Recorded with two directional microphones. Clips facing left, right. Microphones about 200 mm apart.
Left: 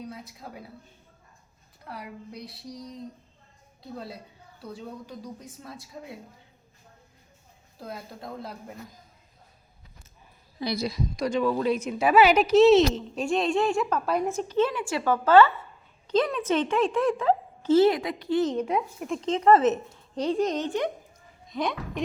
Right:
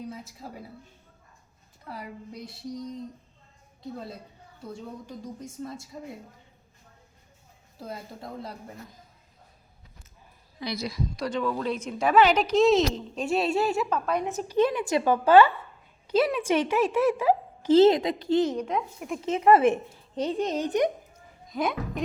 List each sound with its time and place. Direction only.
0.1 s a woman's voice: centre (ahead or behind)
1.9 s a woman's voice: centre (ahead or behind)
4.6 s a woman's voice: centre (ahead or behind)
7.8 s a woman's voice: centre (ahead or behind)
10.6 s a woman's voice: 35° left (ahead or behind)
11.2 s a woman's voice: 10° left (ahead or behind)
14.5 s a woman's voice: 15° right (ahead or behind)
18.5 s a woman's voice: 5° left (ahead or behind)
19.0 s a woman's voice: 5° right (ahead or behind)